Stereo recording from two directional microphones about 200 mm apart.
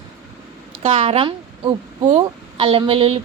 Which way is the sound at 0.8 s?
30° right (ahead or behind).